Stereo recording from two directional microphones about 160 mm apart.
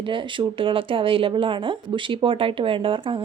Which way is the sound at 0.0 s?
30° right (ahead or behind).